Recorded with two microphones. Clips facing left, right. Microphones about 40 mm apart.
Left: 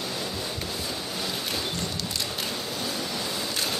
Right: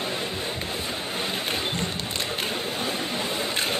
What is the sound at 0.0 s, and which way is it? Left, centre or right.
Boat, right.